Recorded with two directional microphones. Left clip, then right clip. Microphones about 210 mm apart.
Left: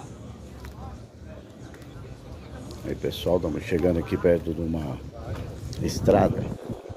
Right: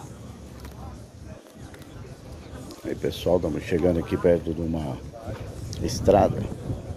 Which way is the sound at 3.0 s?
5° right (ahead or behind).